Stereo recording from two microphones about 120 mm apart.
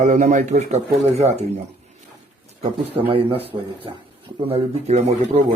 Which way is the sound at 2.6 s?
50° right (ahead or behind).